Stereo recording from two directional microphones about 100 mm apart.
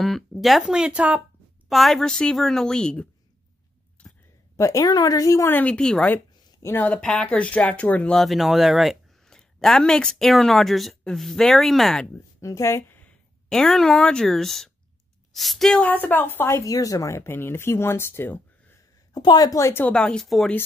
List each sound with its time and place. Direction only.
0.0 s speech: centre (ahead or behind)
1.7 s speech: centre (ahead or behind)
4.0 s a sound: 10° left (ahead or behind)
4.6 s a woman's voice: 35° left (ahead or behind)
5.5 s speech: 15° left (ahead or behind)
6.0 s speech: 25° left (ahead or behind); by 12.1 s 5° left (ahead or behind)
12.4 s speech: 30° left (ahead or behind)
13.5 s speech: 5° left (ahead or behind)
15.8 s speech: 15° left (ahead or behind)
19.1 s a woman's voice: 40° left (ahead or behind)
19.9 s speech: 5° left (ahead or behind)